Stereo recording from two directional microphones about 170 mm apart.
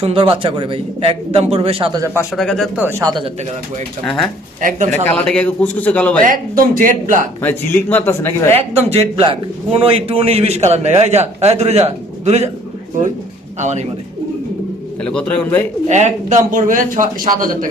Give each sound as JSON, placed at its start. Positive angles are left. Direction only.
{"t": 0.0, "sound": "a man's voice", "side_deg": -30}
{"t": 2.3, "sound": "speech", "side_deg": 0}
{"t": 3.0, "sound": "speech", "side_deg": -25}
{"t": 4.0, "sound": "speech", "side_deg": 0}
{"t": 6.2, "sound": "speech", "side_deg": -55}
{"t": 7.4, "sound": "speech", "side_deg": 10}
{"t": 8.7, "sound": "a man's voice", "side_deg": -35}
{"t": 13.6, "sound": "speech", "side_deg": -45}
{"t": 15.0, "sound": "speech", "side_deg": 5}
{"t": 15.9, "sound": "speech", "side_deg": -45}